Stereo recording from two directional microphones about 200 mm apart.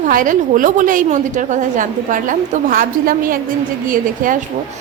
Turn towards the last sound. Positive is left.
turn(degrees=-45)  # may be behind; listen again after turning